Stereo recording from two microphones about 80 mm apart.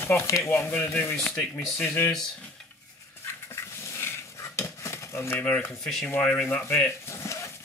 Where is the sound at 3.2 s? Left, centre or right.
Left.